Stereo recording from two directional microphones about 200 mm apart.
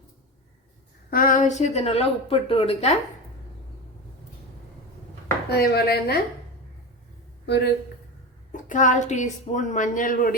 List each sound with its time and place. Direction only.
1.1 s speech: 45° left (ahead or behind)
5.5 s chopping: 50° left (ahead or behind)
7.4 s a man's voice: 55° left (ahead or behind)
8.5 s speech: 40° left (ahead or behind)